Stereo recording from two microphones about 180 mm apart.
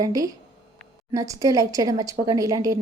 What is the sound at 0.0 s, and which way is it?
A woman's voice, 20° right (ahead or behind).